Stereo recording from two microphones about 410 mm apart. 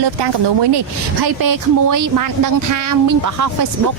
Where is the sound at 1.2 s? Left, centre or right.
Right.